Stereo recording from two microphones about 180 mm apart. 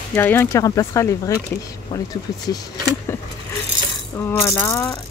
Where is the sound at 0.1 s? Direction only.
15° left (ahead or behind).